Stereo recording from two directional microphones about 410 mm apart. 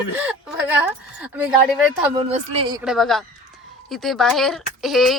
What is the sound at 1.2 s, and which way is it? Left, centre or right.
A woman's voice, centre.